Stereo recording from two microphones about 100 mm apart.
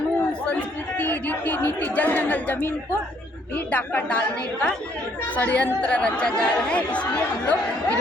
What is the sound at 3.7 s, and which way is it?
Speech, 15° left (ahead or behind).